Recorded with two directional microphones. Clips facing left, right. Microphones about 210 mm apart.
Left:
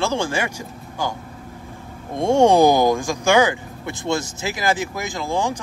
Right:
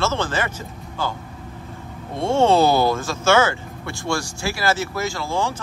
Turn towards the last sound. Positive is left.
turn(degrees=15)  # may be behind; listen again after turning